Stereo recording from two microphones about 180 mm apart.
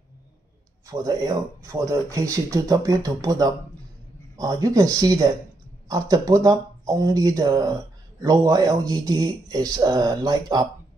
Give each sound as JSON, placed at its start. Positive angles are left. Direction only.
{"t": 0.8, "sound": "speech", "side_deg": -20}